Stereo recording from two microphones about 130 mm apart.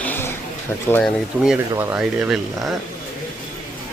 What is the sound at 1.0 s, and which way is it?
Speech, 5° right (ahead or behind).